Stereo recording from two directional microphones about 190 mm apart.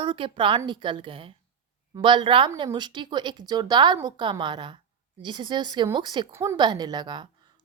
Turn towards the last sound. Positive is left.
turn(degrees=-25)  # may be behind; listen again after turning